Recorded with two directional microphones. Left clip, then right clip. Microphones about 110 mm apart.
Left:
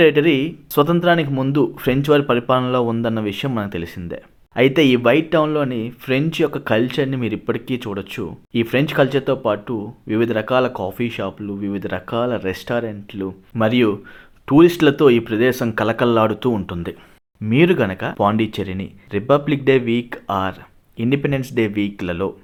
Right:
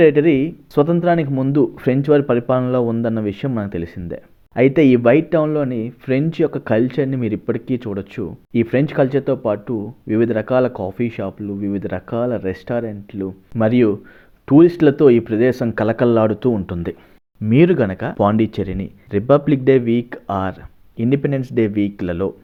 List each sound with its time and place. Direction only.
0.0 s speech: 35° right (ahead or behind)
17.5 s speech: 35° right (ahead or behind)